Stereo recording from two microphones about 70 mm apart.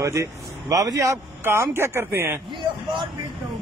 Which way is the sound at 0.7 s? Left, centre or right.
Right.